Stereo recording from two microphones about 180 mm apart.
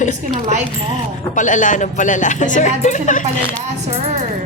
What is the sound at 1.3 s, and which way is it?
Speech, 45° left (ahead or behind).